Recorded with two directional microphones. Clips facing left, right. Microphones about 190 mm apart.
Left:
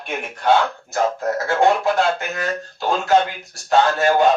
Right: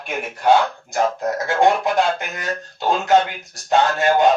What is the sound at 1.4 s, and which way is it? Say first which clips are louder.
Speech: even; 20° right (ahead or behind).